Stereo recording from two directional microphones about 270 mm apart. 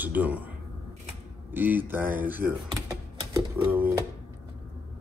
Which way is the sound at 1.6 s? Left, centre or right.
Centre.